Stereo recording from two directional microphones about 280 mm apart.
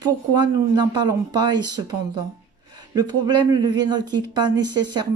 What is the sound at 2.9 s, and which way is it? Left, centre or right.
Speech, centre.